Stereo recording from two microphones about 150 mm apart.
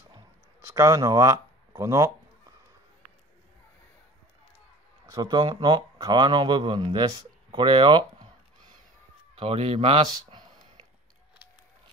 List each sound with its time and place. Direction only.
0.6 s speech: 20° right (ahead or behind)
5.0 s speech: 25° right (ahead or behind)
9.3 s a sound: 40° right (ahead or behind)